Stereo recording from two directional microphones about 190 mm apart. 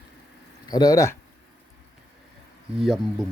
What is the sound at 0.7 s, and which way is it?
Speech, 20° left (ahead or behind).